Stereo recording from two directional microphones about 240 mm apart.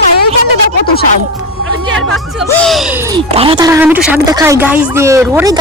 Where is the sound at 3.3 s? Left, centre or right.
Right.